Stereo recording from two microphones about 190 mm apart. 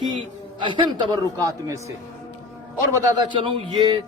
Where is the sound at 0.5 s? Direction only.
25° right (ahead or behind).